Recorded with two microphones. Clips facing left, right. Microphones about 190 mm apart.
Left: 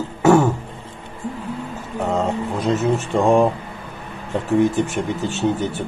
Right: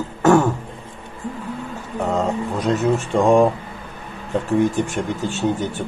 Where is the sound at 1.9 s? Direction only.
Centre (ahead or behind).